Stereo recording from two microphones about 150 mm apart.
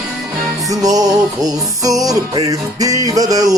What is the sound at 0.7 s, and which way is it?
Music, 25° right (ahead or behind).